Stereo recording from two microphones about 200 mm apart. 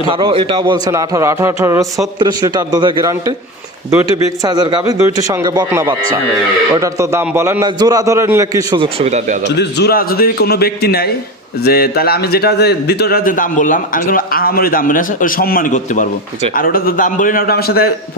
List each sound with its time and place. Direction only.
0.1 s a man's voice: 25° right (ahead or behind)
4.4 s a man's voice: 20° right (ahead or behind)
9.4 s a man's voice: 60° left (ahead or behind)